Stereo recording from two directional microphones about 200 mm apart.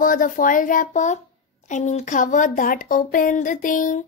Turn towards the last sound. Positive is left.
turn(degrees=40)  # may be behind; listen again after turning